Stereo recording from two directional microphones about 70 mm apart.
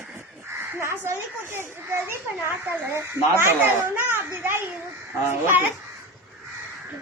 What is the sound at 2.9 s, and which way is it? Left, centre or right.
A child's voice, right.